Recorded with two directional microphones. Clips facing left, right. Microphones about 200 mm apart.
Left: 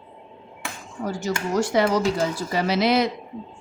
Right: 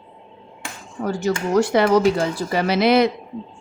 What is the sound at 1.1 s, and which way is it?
Speech, 60° right (ahead or behind).